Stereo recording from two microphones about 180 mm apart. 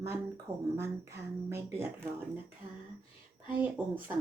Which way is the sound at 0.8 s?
15° right (ahead or behind).